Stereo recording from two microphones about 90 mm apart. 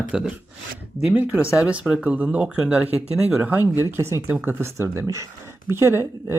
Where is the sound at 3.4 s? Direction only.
20° right (ahead or behind).